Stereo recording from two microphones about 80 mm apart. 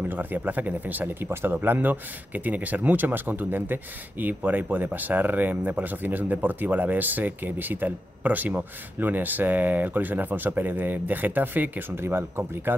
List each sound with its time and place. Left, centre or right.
0.1 s speech: right